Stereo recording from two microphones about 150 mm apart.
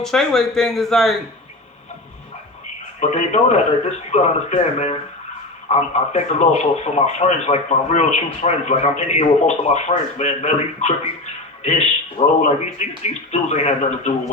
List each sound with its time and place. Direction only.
0.0 s speech: 5° left (ahead or behind)
3.0 s a man's voice: 50° left (ahead or behind)